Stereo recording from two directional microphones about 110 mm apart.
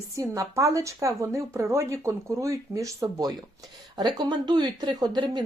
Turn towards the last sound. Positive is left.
turn(degrees=-40)  # may be behind; listen again after turning